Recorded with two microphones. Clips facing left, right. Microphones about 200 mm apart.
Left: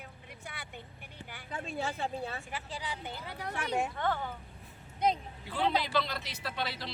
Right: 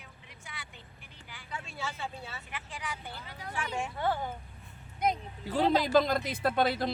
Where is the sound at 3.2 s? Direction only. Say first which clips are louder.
Left 4 dB; 65° left (ahead or behind).